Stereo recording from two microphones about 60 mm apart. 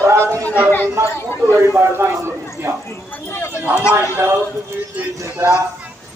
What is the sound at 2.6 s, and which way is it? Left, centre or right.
Speech, right.